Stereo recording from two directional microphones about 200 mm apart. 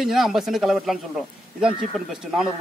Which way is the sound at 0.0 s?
Centre (ahead or behind).